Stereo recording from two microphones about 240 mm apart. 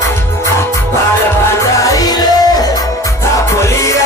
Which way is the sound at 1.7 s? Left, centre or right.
Centre.